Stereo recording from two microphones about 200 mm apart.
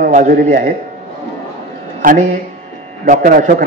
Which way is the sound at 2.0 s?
40° right (ahead or behind).